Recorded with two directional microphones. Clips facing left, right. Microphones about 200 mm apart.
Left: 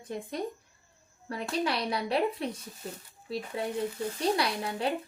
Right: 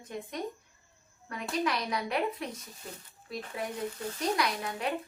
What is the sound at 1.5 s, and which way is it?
Speech, 30° left (ahead or behind).